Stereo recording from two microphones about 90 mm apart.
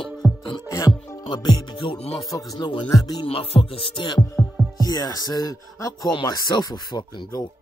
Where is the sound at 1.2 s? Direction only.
60° left (ahead or behind).